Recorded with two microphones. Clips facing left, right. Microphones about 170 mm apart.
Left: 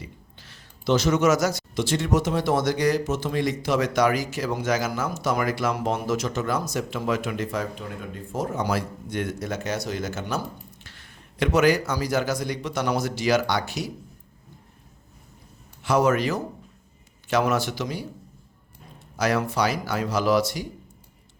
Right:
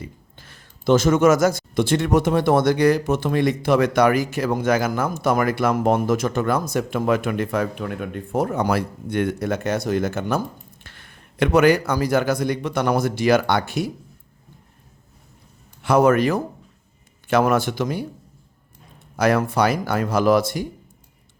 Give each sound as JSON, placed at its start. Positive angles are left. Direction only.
{"t": 0.0, "sound": "speech", "side_deg": -50}
{"t": 15.8, "sound": "speech", "side_deg": -55}
{"t": 19.1, "sound": "speech", "side_deg": -55}